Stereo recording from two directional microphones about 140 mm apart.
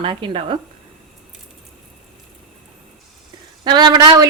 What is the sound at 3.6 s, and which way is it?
Speech, 30° right (ahead or behind).